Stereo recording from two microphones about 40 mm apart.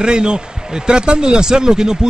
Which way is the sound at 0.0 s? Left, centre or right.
Right.